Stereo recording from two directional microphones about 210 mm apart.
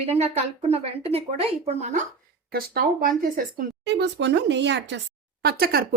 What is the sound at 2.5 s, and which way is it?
A woman's voice, 45° right (ahead or behind).